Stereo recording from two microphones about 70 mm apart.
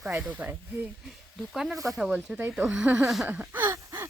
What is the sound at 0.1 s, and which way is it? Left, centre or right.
Speech, right.